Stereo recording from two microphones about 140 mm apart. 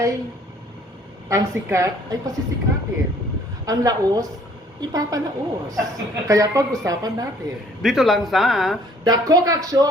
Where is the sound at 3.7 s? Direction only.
25° right (ahead or behind).